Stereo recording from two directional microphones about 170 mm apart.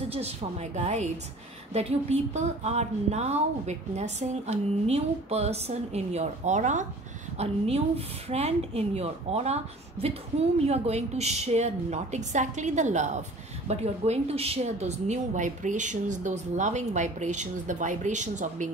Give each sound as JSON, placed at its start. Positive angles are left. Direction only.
{"t": 0.1, "sound": "a woman's voice", "side_deg": -40}
{"t": 10.6, "sound": "a woman's voice", "side_deg": -40}